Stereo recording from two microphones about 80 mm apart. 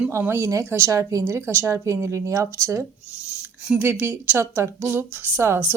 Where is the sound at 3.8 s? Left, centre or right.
Right.